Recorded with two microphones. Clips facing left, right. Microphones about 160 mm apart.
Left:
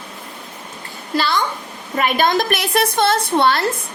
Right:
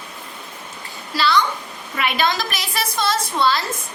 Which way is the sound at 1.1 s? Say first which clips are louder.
Even; 50° left (ahead or behind).